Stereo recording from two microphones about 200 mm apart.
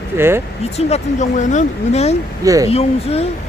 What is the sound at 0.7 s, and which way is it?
Speech, 35° left (ahead or behind).